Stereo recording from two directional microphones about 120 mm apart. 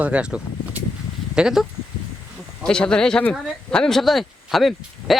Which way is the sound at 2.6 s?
5° left (ahead or behind).